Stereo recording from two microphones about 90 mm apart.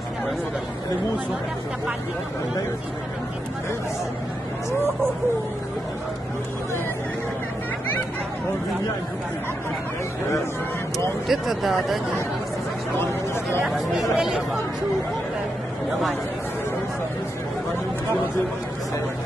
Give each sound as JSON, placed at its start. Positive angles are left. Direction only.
{"t": 11.2, "sound": "speech", "side_deg": 0}
{"t": 13.0, "sound": "a sound", "side_deg": 25}
{"t": 13.7, "sound": "speech", "side_deg": 0}
{"t": 15.9, "sound": "speech", "side_deg": 0}